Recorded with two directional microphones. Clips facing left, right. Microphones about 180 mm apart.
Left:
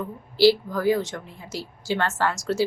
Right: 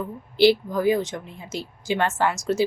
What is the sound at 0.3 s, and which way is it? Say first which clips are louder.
A woman's voice: even; 20° right (ahead or behind).